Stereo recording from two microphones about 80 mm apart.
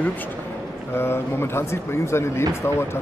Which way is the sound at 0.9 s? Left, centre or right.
Left.